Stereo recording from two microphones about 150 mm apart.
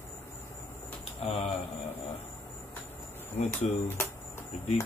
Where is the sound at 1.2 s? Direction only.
45° left (ahead or behind).